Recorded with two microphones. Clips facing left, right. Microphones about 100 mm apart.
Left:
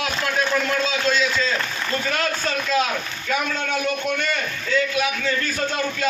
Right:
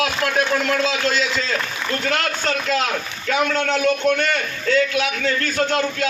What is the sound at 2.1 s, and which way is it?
A man's voice, 65° right (ahead or behind).